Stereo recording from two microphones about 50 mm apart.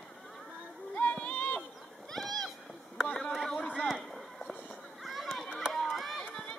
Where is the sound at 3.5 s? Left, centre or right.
Left.